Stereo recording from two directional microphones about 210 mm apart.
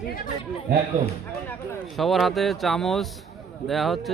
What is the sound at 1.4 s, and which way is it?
Speech, 5° left (ahead or behind).